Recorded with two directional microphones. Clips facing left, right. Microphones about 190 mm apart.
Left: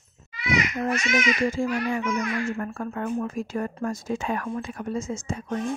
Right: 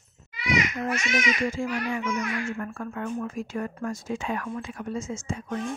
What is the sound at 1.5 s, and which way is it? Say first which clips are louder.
A child's voice: left 3 dB; 30° left (ahead or behind).